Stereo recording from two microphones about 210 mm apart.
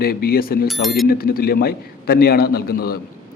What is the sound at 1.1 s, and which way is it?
A man's voice, 45° left (ahead or behind).